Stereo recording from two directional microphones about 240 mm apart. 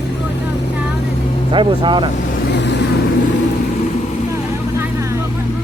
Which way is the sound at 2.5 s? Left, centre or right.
Left.